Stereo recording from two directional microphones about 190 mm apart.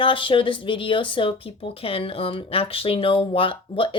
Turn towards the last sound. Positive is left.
turn(degrees=30)  # may be behind; listen again after turning